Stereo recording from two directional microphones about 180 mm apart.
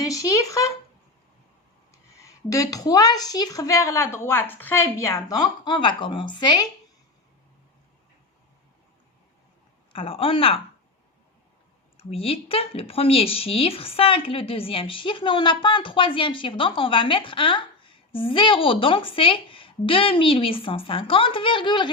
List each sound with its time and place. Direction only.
0.0 s a sound: 20° left (ahead or behind)
1.9 s speech: 15° left (ahead or behind)
9.9 s a woman's voice: 30° left (ahead or behind)
11.9 s speech: 30° left (ahead or behind)